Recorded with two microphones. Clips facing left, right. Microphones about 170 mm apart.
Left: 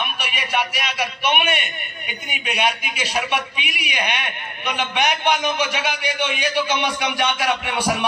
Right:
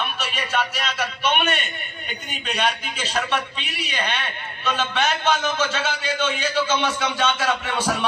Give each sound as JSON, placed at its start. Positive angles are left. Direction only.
{"t": 0.0, "sound": "a man's voice", "side_deg": 10}